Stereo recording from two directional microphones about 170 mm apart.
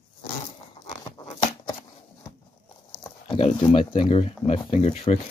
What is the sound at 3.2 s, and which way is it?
Speech, 30° left (ahead or behind).